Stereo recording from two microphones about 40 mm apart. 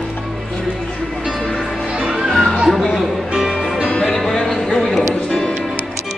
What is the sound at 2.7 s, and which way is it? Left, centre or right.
Music, centre.